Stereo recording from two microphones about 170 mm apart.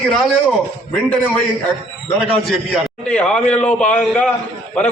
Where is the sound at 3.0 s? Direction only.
5° left (ahead or behind).